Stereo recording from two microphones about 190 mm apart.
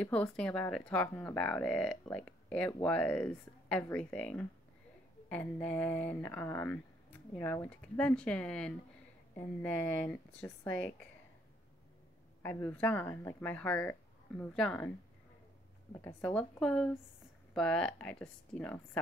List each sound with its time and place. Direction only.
0.0 s speech: 5° left (ahead or behind)
12.4 s speech: 10° left (ahead or behind)
15.9 s speech: 20° left (ahead or behind)
16.2 s speech: 5° left (ahead or behind)